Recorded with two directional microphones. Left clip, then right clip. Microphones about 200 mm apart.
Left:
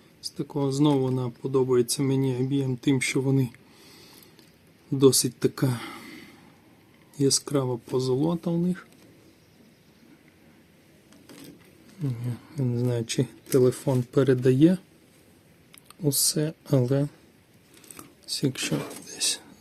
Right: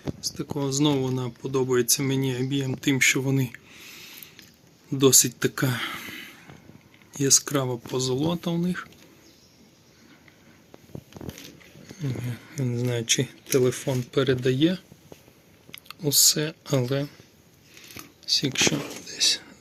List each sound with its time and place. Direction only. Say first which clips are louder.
0.3 s speech: left 2 dB; 15° left (ahead or behind)
4.9 s speech: right 1 dB; 20° left (ahead or behind)
12.2 s speech: even; 10° left (ahead or behind)
14.1 s speech: left 2 dB; 35° left (ahead or behind)
15.7 s speech: right 4 dB; 20° left (ahead or behind)
17.9 s a sound: right 9 dB; 35° left (ahead or behind)
19.0 s whispering: right 9 dB; 20° left (ahead or behind)